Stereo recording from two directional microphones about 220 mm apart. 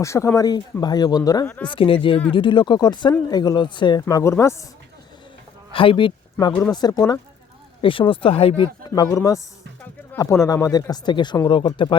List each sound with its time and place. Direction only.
0.0 s speech: 15° left (ahead or behind)
5.7 s speech: 25° left (ahead or behind)
6.3 s speech: 10° left (ahead or behind)